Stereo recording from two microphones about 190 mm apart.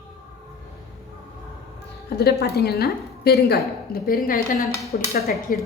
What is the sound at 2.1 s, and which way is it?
A woman's voice, 55° left (ahead or behind).